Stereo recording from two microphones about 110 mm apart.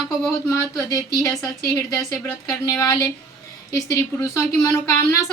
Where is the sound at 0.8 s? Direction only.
30° left (ahead or behind).